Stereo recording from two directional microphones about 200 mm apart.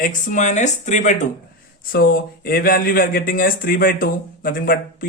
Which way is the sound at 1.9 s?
50° left (ahead or behind).